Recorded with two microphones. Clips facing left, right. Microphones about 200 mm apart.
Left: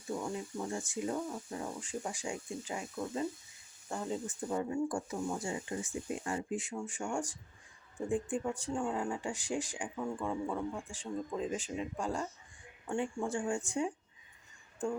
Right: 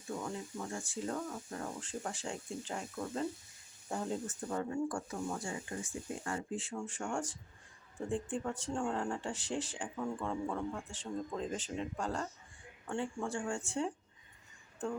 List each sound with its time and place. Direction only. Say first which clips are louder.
0.1 s speech: left 3 dB; 10° left (ahead or behind)
4.3 s speech: left 2 dB; 10° left (ahead or behind)